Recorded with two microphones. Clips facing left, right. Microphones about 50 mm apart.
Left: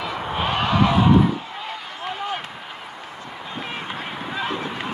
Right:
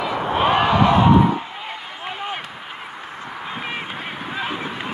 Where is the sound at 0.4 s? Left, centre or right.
Centre.